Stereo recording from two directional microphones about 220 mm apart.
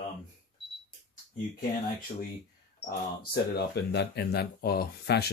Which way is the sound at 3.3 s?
50° left (ahead or behind).